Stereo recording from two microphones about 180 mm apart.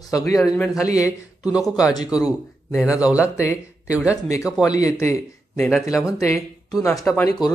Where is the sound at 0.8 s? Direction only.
20° left (ahead or behind).